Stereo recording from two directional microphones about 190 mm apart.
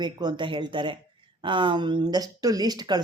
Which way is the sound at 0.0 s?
20° right (ahead or behind).